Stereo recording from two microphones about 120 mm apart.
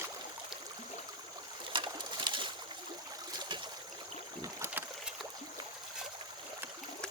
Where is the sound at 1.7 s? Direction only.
40° right (ahead or behind).